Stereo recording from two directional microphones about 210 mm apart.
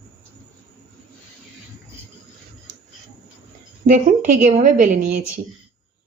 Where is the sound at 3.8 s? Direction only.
35° right (ahead or behind).